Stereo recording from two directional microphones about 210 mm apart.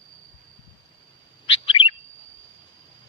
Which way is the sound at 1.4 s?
25° left (ahead or behind).